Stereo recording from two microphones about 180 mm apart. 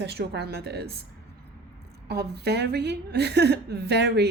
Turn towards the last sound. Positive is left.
turn(degrees=-65)  # may be behind; listen again after turning